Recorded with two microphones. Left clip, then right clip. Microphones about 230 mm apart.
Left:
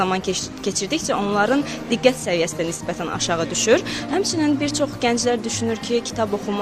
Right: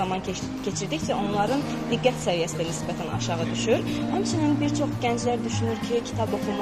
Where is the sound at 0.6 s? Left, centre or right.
Left.